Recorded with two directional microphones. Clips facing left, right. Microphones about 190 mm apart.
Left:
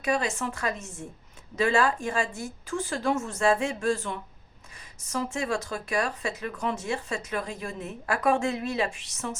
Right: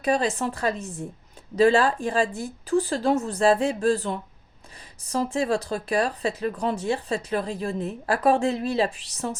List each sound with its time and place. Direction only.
0.0 s speech: 35° right (ahead or behind)